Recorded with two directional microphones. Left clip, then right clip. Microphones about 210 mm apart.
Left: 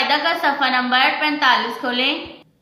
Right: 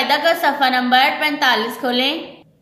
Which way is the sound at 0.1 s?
50° right (ahead or behind).